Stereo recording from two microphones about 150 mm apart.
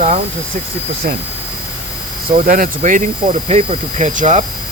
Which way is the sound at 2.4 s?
65° right (ahead or behind).